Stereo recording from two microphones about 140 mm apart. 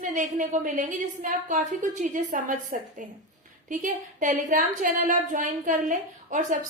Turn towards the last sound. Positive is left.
turn(degrees=-65)  # may be behind; listen again after turning